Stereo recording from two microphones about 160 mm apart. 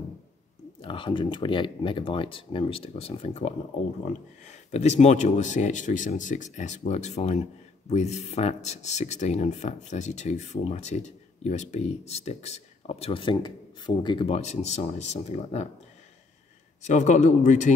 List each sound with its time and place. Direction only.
0.7 s speech: 30° left (ahead or behind)
16.8 s speech: 45° left (ahead or behind)